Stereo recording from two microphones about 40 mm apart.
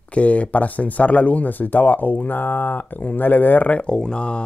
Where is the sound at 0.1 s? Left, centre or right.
Left.